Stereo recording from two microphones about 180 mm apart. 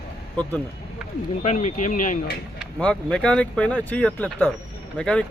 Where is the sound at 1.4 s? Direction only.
40° left (ahead or behind).